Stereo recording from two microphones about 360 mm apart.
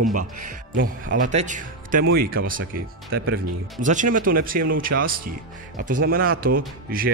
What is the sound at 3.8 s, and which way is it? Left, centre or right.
Speech, right.